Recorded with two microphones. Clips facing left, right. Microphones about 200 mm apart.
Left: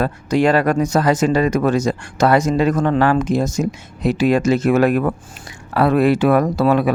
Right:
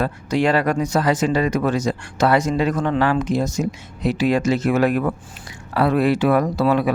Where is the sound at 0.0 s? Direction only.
45° left (ahead or behind).